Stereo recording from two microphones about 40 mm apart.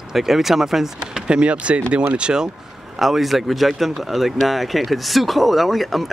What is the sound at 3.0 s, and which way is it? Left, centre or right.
Speech, centre.